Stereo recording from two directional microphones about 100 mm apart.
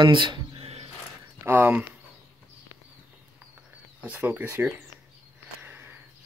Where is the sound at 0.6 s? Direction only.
90° right.